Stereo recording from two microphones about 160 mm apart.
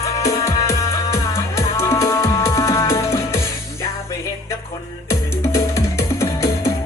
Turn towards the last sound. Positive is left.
turn(degrees=15)  # may be behind; listen again after turning